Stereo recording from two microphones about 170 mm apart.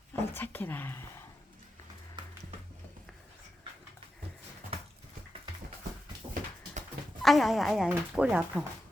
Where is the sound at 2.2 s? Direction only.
25° right (ahead or behind).